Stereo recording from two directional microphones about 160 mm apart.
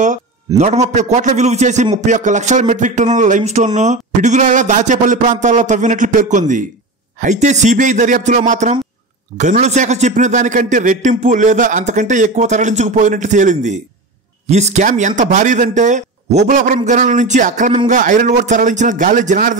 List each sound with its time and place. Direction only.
0.6 s speech: 45° right (ahead or behind)